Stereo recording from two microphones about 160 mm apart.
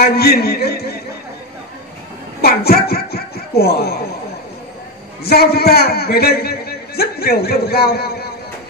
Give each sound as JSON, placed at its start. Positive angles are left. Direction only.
{"t": 0.0, "sound": "a man's voice", "side_deg": 75}
{"t": 2.4, "sound": "speech", "side_deg": 75}
{"t": 5.2, "sound": "a man's voice", "side_deg": 80}